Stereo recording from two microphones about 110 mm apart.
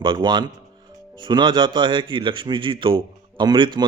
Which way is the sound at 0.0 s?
45° right (ahead or behind).